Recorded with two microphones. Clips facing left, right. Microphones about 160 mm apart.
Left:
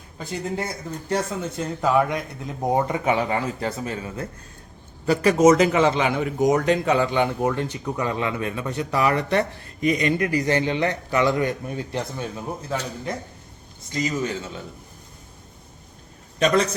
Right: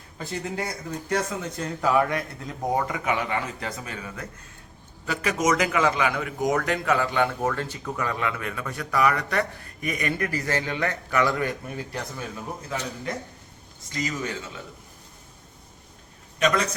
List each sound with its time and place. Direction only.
0.3 s a man's voice: 25° left (ahead or behind)
16.4 s a man's voice: 35° left (ahead or behind)